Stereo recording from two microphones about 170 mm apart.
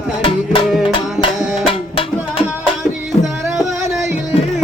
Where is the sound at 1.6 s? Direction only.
30° left (ahead or behind).